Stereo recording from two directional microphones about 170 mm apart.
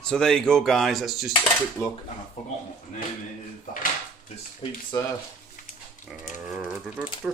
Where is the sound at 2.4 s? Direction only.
45° left (ahead or behind).